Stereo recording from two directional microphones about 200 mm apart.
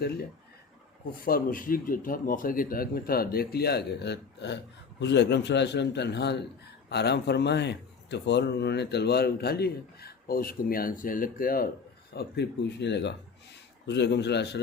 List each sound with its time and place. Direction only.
1.2 s speech: 45° left (ahead or behind)
12.1 s speech: 55° left (ahead or behind)